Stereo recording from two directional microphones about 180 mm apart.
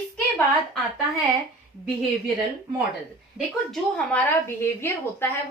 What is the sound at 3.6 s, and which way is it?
A woman's voice, 5° left (ahead or behind).